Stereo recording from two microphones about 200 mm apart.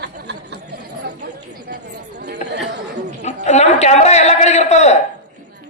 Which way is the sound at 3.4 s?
35° left (ahead or behind).